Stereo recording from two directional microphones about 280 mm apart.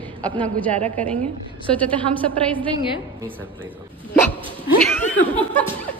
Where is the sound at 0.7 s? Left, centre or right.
Right.